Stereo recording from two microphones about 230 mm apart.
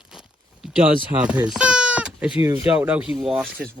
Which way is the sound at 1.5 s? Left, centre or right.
Centre.